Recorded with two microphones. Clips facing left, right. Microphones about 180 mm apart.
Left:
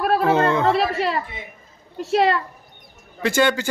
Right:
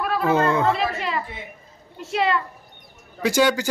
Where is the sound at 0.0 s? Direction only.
45° left (ahead or behind).